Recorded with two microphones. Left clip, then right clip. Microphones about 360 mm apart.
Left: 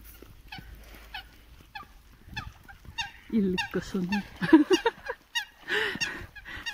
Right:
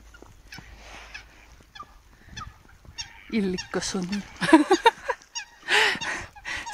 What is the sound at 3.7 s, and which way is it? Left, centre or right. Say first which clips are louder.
Speech: right 2 dB; centre.